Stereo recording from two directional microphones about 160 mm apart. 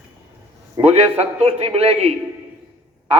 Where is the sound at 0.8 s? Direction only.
40° right (ahead or behind).